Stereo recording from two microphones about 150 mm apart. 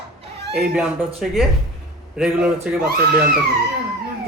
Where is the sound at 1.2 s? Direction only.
Centre (ahead or behind).